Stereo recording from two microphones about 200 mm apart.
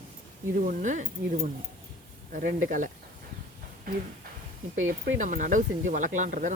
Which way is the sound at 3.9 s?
45° right (ahead or behind).